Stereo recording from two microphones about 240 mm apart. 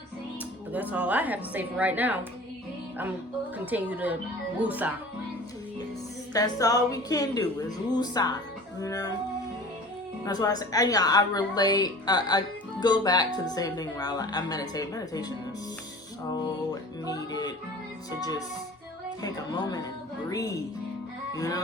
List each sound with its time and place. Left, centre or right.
0.7 s a woman's voice: centre
3.7 s a woman's voice: centre
6.3 s a woman's voice: centre
10.2 s a woman's voice: centre
17.1 s music: centre
18.2 s a woman's voice: centre